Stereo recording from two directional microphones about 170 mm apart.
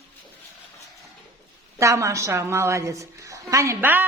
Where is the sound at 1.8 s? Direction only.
15° right (ahead or behind).